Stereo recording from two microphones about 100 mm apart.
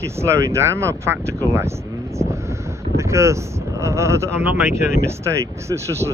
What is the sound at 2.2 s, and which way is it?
Wind noise, 30° right (ahead or behind).